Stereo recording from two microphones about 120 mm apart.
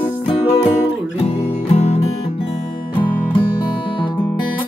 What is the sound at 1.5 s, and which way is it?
Music, 60° left (ahead or behind).